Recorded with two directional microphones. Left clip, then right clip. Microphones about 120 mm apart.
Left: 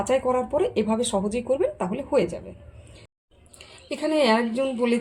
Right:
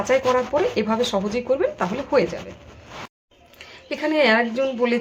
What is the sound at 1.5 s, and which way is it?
Speech, 15° left (ahead or behind).